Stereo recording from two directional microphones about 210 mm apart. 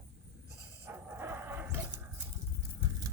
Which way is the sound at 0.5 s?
10° right (ahead or behind).